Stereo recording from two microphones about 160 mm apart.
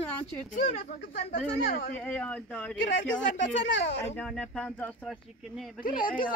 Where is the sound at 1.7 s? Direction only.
65° left (ahead or behind).